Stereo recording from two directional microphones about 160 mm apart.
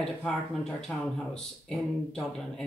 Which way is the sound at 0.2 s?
5° left (ahead or behind).